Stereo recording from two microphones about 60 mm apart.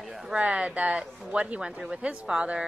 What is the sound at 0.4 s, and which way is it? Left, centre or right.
A woman's voice, centre.